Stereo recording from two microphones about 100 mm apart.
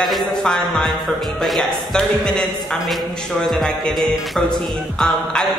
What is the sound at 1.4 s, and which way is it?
Speech, 5° left (ahead or behind).